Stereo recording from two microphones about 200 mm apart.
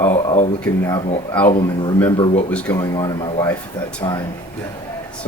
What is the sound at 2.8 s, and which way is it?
Speech, 20° left (ahead or behind).